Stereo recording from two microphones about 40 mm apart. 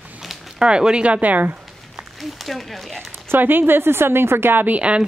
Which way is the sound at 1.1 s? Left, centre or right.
Right.